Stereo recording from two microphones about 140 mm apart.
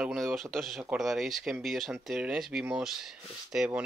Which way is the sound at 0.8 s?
5° right (ahead or behind).